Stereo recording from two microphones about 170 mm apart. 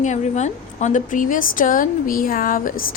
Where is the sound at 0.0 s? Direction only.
45° left (ahead or behind).